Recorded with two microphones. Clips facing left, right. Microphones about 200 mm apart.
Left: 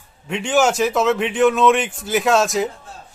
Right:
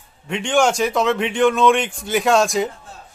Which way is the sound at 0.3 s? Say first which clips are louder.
Even; 5° left (ahead or behind).